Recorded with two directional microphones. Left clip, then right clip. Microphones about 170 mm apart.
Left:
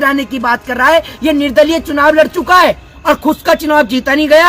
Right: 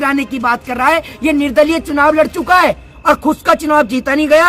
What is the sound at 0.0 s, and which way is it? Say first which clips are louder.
A woman's voice: left 2 dB; 30° right (ahead or behind).